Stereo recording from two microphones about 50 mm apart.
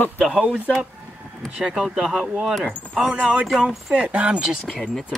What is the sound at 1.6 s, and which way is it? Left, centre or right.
Speech, centre.